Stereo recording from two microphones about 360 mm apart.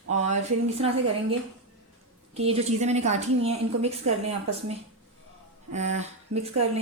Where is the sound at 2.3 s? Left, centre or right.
Centre.